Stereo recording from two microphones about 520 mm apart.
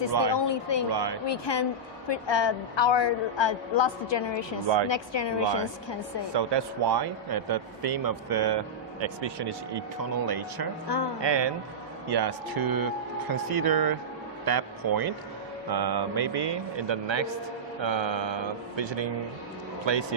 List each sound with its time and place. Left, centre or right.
0.1 s a man's voice: right
0.3 s speech: left
0.9 s a man's voice: right
1.3 s a woman's voice: left
6.3 s a man's voice: right
10.8 s speech: left
11.2 s a man's voice: right